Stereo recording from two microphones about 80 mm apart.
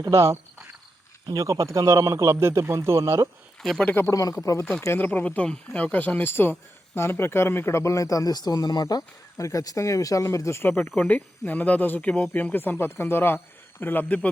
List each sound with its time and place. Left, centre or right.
0.1 s speech: right
1.4 s speech: right
3.6 s speech: centre
3.8 s speech: left
4.1 s speech: left
4.9 s speech: left